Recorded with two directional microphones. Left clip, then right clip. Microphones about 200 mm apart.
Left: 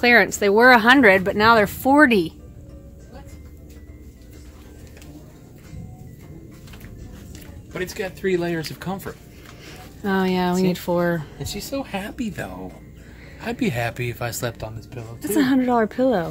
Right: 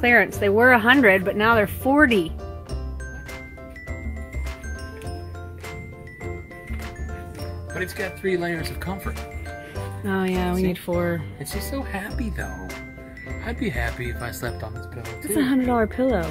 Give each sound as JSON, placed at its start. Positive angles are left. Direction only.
{"t": 0.0, "sound": "speech", "side_deg": 5}
{"t": 7.7, "sound": "speech", "side_deg": 10}
{"t": 10.0, "sound": "speech", "side_deg": 5}
{"t": 11.9, "sound": "speech", "side_deg": 25}
{"t": 13.5, "sound": "speech", "side_deg": 35}
{"t": 15.2, "sound": "speech", "side_deg": 0}